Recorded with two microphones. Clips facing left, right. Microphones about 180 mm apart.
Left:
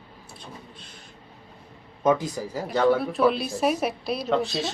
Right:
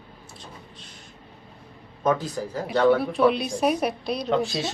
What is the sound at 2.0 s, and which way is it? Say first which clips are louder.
Speech: left 1 dB; 15° left (ahead or behind).